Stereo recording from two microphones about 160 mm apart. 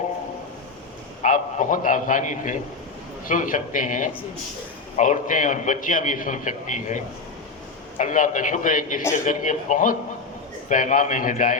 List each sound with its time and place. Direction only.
1.2 s a man's voice: 50° left (ahead or behind)